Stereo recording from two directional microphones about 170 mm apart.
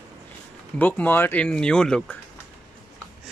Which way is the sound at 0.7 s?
10° left (ahead or behind).